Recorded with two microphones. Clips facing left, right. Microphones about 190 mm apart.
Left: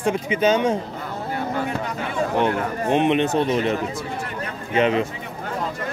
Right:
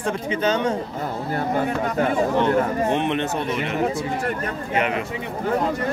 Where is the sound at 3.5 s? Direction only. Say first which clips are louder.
Left 1 dB; 35° left (ahead or behind).